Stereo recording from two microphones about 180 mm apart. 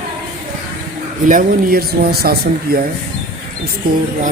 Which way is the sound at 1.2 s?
50° right (ahead or behind).